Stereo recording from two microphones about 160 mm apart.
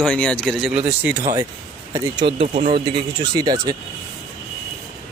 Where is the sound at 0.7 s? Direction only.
10° right (ahead or behind).